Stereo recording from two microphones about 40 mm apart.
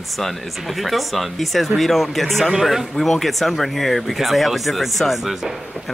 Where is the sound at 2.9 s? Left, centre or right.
Centre.